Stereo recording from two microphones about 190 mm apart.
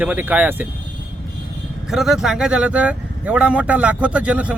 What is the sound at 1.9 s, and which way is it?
Speech, centre (ahead or behind).